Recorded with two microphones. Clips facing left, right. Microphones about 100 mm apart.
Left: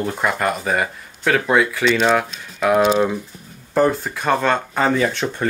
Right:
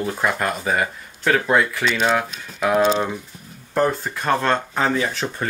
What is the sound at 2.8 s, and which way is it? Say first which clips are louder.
Speech: left 3 dB; 10° left (ahead or behind).